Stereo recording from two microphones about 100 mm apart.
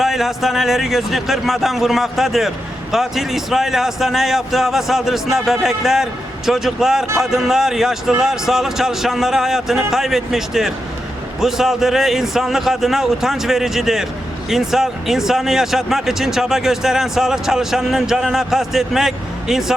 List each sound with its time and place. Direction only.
0.0 s speech: centre (ahead or behind)